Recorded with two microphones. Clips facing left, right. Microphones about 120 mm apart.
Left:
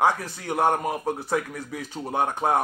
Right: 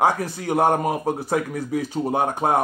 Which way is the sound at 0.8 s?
10° right (ahead or behind).